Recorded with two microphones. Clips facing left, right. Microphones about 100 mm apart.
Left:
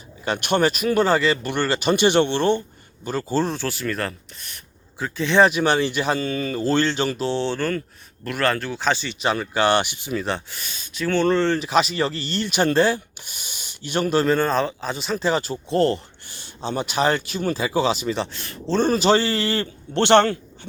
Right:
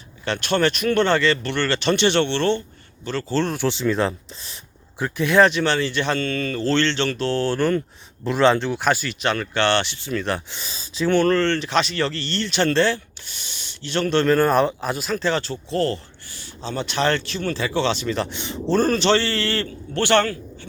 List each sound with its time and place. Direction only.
0.3 s speech: 15° left (ahead or behind)
3.7 s speech: 20° right (ahead or behind)
5.0 s speech: 5° right (ahead or behind)
5.4 s speech: 10° left (ahead or behind)
8.2 s speech: 25° right (ahead or behind); by 10.2 s 10° left (ahead or behind)
10.5 s speech: 30° right (ahead or behind)
11.3 s speech: 5° left (ahead or behind)
14.3 s speech: 10° right (ahead or behind); by 18.3 s 5° left (ahead or behind)
18.3 s speech: 20° right (ahead or behind)
18.9 s speech: 10° left (ahead or behind)